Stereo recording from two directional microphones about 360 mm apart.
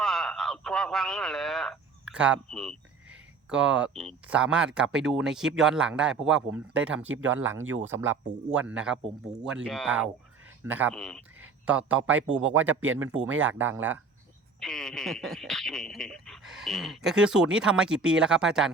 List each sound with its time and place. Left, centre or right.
0.0 s a sound: centre
3.5 s speech: centre
7.2 s speech: right
7.9 s speech: centre
13.1 s speech: right
13.4 s speech: centre